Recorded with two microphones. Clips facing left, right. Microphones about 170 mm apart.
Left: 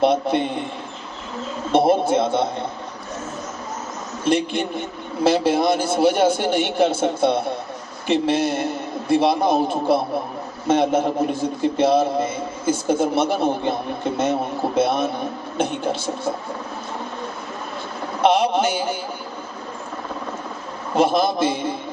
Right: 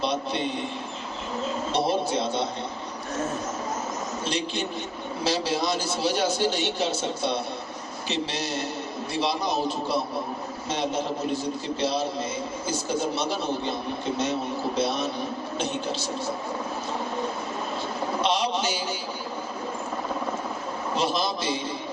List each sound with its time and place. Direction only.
0.0 s a man's voice: 55° left (ahead or behind)
1.7 s a man's voice: 55° left (ahead or behind)
4.3 s a man's voice: 55° left (ahead or behind)
18.2 s a man's voice: 55° left (ahead or behind)
20.9 s a man's voice: 55° left (ahead or behind)